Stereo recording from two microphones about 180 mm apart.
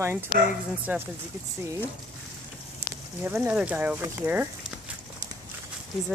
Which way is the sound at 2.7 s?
15° right (ahead or behind).